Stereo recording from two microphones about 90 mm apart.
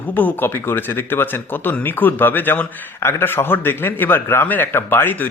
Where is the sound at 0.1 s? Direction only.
20° left (ahead or behind).